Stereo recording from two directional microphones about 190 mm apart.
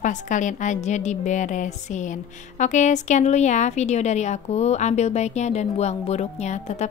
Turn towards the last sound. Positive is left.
turn(degrees=35)  # may be behind; listen again after turning